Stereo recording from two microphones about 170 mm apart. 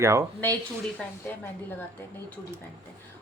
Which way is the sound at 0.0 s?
15° right (ahead or behind).